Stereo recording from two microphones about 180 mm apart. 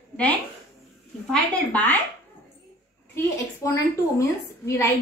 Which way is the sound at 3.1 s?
15° left (ahead or behind).